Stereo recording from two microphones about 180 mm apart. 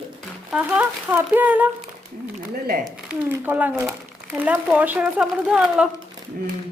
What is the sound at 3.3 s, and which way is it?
Speech, 10° right (ahead or behind).